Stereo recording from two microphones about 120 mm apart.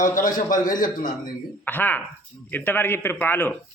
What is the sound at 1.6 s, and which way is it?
A man's voice, 15° left (ahead or behind).